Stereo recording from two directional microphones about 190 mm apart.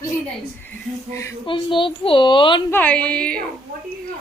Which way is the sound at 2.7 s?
5° left (ahead or behind).